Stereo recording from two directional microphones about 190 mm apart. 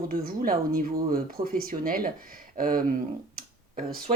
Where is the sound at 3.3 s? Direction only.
50° right (ahead or behind).